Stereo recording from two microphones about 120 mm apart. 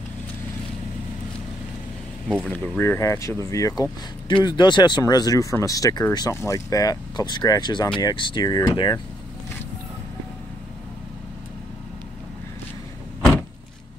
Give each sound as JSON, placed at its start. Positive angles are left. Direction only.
{"t": 2.3, "sound": "speech", "side_deg": 15}
{"t": 4.3, "sound": "speech", "side_deg": 40}